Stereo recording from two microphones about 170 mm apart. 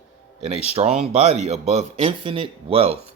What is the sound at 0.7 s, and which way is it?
Speech, 35° right (ahead or behind).